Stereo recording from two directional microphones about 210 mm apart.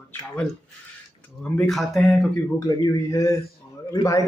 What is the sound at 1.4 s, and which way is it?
Speech, 5° left (ahead or behind).